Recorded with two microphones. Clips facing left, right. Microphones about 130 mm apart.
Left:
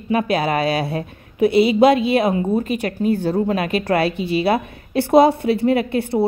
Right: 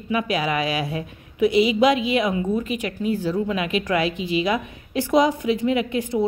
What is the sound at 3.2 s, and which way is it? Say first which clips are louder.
A woman's voice: left 4 dB; 50° left (ahead or behind).